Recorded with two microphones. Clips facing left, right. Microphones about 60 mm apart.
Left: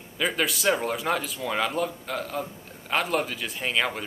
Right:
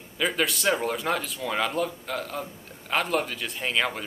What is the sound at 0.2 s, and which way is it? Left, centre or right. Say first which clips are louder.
Speech: even; centre.